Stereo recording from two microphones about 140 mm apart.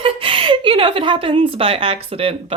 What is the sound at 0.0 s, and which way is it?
A woman's voice, 40° right (ahead or behind).